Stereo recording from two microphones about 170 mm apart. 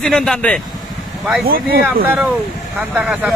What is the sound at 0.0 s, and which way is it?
Speech, 5° left (ahead or behind).